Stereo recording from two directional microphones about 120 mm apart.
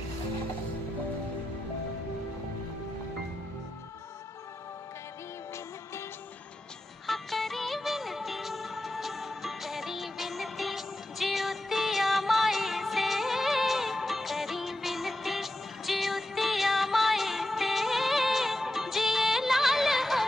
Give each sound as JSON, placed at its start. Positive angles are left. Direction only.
{"t": 7.1, "sound": "music", "side_deg": 0}